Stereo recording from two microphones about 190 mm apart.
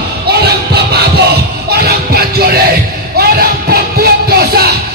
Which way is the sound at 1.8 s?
55° right (ahead or behind).